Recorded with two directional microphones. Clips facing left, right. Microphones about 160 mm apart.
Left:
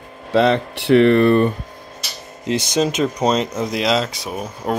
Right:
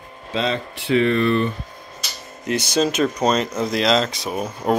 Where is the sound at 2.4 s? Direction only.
20° left (ahead or behind).